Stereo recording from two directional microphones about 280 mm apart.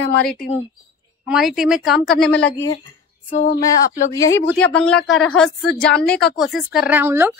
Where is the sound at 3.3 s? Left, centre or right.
Left.